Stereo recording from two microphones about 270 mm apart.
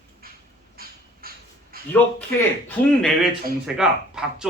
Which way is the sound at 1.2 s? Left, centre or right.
Right.